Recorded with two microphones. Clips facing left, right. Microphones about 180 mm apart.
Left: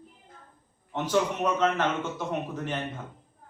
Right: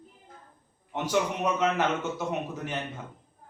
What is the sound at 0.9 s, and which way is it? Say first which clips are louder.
A man's voice: left 1 dB; 10° right (ahead or behind).